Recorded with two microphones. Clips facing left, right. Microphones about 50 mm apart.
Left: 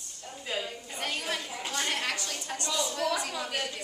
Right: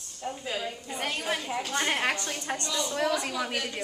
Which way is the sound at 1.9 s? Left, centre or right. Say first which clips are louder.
Right 4 dB; right.